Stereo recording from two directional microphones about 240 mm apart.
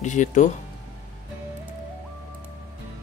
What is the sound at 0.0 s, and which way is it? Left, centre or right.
Speech, left.